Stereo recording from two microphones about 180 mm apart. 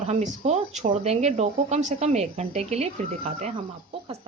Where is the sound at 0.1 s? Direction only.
40° right (ahead or behind).